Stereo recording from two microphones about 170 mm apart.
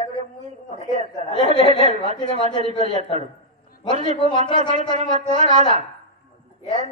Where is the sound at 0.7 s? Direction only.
45° right (ahead or behind).